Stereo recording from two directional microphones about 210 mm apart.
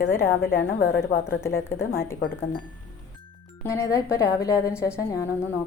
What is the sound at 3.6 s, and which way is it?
A woman's voice, 15° left (ahead or behind).